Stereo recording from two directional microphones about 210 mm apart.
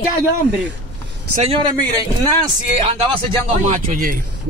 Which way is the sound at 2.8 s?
25° right (ahead or behind).